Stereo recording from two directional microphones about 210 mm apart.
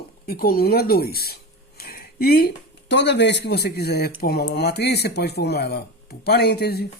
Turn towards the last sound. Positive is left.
turn(degrees=50)  # may be behind; listen again after turning